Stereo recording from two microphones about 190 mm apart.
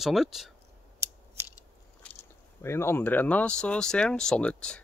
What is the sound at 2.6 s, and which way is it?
Speech, 15° left (ahead or behind).